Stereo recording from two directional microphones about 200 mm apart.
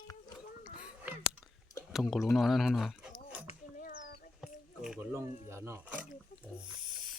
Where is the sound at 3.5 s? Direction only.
40° left (ahead or behind).